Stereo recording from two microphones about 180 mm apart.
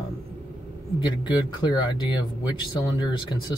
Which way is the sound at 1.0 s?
25° left (ahead or behind).